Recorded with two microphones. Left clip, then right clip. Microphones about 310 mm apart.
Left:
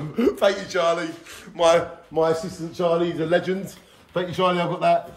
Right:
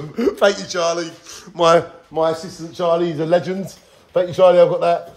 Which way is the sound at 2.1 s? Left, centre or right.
Centre.